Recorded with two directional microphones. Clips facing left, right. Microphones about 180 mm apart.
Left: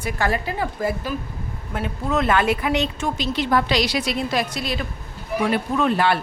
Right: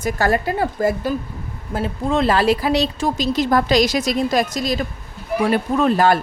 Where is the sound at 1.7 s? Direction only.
30° right (ahead or behind).